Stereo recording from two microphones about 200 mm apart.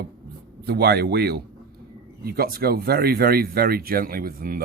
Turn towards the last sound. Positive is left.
turn(degrees=-45)  # may be behind; listen again after turning